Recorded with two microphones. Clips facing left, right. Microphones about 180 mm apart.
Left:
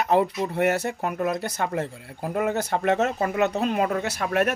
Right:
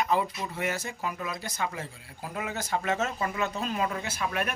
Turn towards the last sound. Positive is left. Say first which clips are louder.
# left 8 dB
turn(degrees=65)  # may be behind; listen again after turning